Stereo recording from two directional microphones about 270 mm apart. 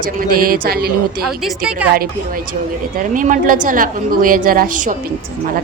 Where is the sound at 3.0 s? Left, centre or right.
Right.